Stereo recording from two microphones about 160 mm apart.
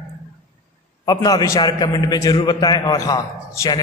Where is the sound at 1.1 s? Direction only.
25° left (ahead or behind).